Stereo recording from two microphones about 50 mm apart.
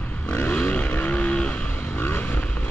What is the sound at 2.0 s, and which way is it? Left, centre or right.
Vehicle, left.